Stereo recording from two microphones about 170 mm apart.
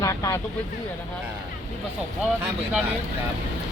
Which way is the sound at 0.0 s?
20° left (ahead or behind).